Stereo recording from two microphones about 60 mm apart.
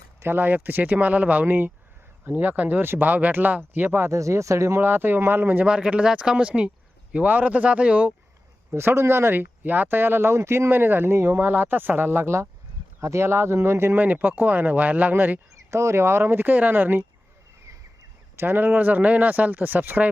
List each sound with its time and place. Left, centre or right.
0.2 s speech: right
4.1 s speech: right
4.8 s speech: right
5.6 s speech: centre
8.7 s speech: right
10.7 s speech: right
13.9 s speech: right
15.7 s speech: right
18.3 s speech: right